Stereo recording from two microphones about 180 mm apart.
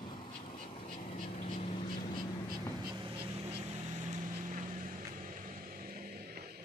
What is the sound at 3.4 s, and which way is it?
Vehicle, 30° right (ahead or behind).